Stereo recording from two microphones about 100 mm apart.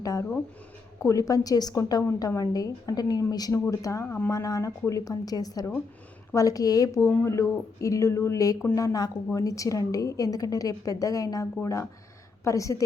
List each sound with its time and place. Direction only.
0.0 s a woman's voice: 35° left (ahead or behind)